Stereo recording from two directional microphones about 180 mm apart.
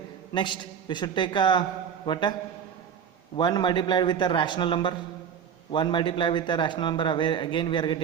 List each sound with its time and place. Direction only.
0.3 s a man's voice: 25° left (ahead or behind)
3.3 s a man's voice: 25° left (ahead or behind)